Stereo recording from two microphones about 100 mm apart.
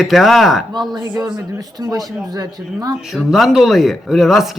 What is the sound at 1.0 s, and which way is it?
Speech, 40° right (ahead or behind).